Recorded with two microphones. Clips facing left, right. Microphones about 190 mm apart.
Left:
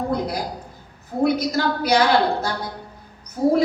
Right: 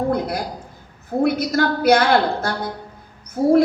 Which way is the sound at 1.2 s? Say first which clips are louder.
Right 1 dB; 55° right (ahead or behind).